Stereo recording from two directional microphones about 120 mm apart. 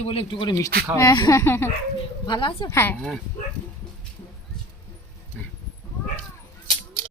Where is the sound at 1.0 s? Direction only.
30° left (ahead or behind).